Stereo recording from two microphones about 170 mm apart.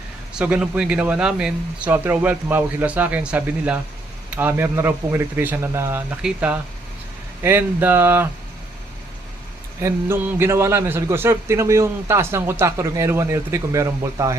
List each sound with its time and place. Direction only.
0.3 s a man's voice: 5° right (ahead or behind)
9.8 s a man's voice: 15° right (ahead or behind)